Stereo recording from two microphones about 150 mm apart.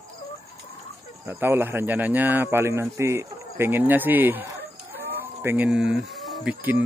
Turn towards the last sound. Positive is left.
turn(degrees=-10)  # may be behind; listen again after turning